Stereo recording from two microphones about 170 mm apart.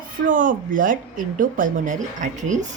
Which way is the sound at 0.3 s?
50° right (ahead or behind).